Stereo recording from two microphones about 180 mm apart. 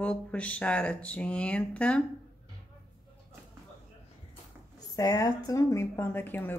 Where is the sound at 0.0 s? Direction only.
5° left (ahead or behind).